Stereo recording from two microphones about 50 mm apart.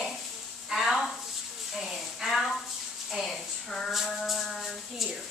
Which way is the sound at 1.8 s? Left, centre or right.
Centre.